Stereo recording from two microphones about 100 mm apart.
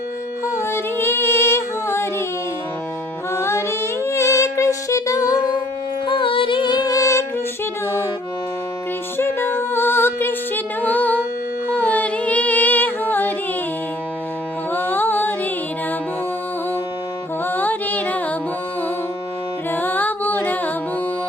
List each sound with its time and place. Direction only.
0.4 s music: 25° left (ahead or behind)
3.3 s music: 25° left (ahead or behind)
6.1 s music: 60° left (ahead or behind); by 7.3 s 30° left (ahead or behind)
9.1 s music: 25° left (ahead or behind)
14.7 s music: 20° left (ahead or behind)
17.4 s music: 20° left (ahead or behind)
19.7 s a capella: 20° left (ahead or behind)